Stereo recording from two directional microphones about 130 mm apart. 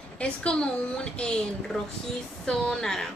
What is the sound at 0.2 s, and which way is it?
A woman's voice, 10° left (ahead or behind).